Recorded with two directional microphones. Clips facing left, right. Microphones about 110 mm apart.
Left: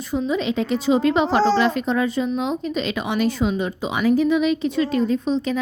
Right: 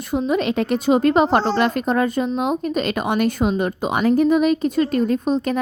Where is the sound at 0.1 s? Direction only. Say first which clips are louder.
Right 2 dB; 60° right (ahead or behind).